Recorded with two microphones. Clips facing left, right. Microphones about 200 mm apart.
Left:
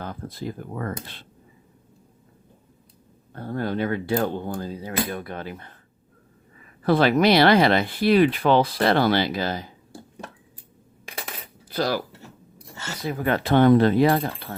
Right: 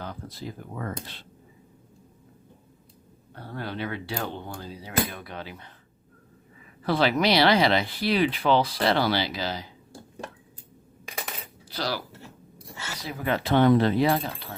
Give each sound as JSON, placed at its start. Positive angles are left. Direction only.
{"t": 0.0, "sound": "speech", "side_deg": 50}
{"t": 3.3, "sound": "speech", "side_deg": 50}
{"t": 6.8, "sound": "speech", "side_deg": 50}
{"t": 11.7, "sound": "speech", "side_deg": 50}